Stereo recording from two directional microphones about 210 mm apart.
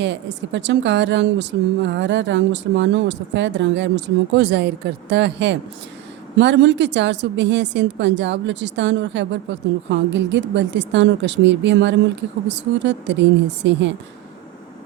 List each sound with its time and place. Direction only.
0.0 s a woman's voice: 60° right (ahead or behind)